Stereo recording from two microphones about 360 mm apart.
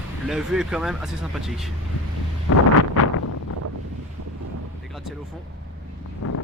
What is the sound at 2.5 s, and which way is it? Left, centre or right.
Wind noise, left.